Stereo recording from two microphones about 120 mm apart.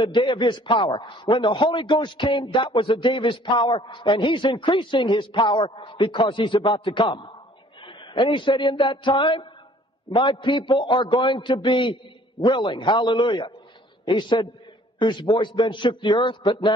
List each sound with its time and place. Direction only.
0.0 s a man's voice: 40° left (ahead or behind)